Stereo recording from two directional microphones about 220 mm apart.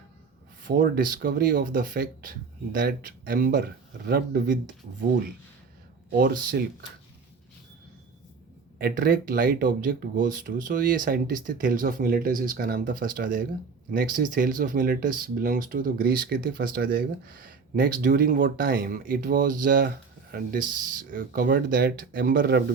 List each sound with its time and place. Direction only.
0.6 s speech: 40° right (ahead or behind)
6.1 s speech: 40° right (ahead or behind)
8.8 s speech: 40° right (ahead or behind)